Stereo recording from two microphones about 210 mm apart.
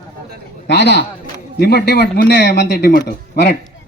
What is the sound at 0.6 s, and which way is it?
A man's voice, 55° left (ahead or behind).